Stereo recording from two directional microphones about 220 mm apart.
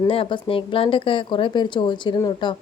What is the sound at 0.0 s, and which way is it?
Speech, 25° left (ahead or behind).